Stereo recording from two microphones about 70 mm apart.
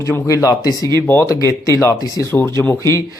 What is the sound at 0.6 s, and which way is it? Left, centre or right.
Speech, left.